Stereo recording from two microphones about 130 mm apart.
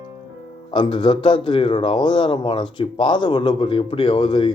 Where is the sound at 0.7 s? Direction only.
40° left (ahead or behind).